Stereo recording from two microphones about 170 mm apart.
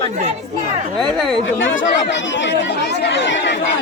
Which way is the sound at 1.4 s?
90° left.